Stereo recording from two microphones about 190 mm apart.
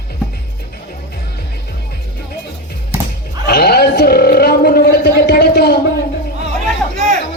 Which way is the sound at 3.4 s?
55° left (ahead or behind).